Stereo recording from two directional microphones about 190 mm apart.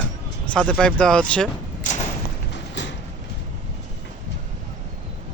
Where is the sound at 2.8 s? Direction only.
70° left (ahead or behind).